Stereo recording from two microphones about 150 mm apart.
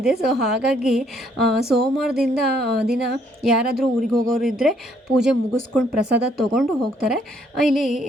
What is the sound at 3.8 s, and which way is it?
A woman's voice, centre (ahead or behind).